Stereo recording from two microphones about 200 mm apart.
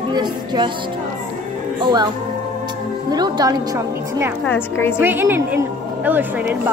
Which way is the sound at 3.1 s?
20° right (ahead or behind).